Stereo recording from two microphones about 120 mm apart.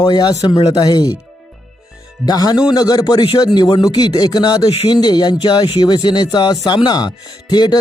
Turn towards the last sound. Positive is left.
turn(degrees=35)  # may be behind; listen again after turning